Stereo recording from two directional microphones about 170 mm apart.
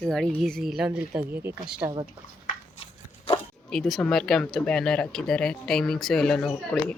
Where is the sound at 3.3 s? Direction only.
35° left (ahead or behind).